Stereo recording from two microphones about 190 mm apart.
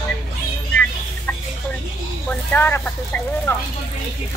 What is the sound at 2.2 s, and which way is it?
Speech, 10° left (ahead or behind).